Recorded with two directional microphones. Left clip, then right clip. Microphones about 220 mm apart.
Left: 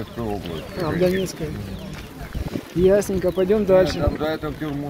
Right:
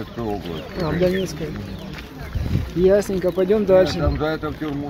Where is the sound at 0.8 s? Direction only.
10° left (ahead or behind).